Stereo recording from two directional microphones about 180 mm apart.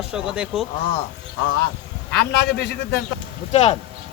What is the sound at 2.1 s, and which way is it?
Speech, 65° left (ahead or behind).